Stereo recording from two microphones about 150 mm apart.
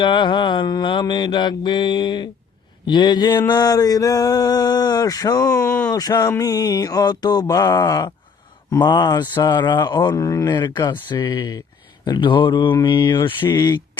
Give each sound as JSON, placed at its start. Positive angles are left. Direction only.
{"t": 0.0, "sound": "mantra", "side_deg": 35}
{"t": 2.8, "sound": "speech", "side_deg": 30}
{"t": 12.0, "sound": "mantra", "side_deg": 30}
{"t": 13.5, "sound": "speech", "side_deg": 25}